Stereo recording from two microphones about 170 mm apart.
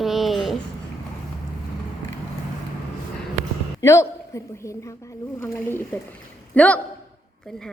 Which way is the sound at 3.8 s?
15° left (ahead or behind).